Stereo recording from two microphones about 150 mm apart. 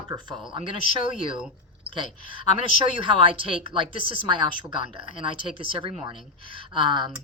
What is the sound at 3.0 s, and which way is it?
Speech, 35° right (ahead or behind).